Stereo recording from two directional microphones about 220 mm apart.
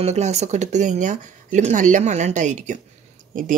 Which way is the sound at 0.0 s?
30° right (ahead or behind).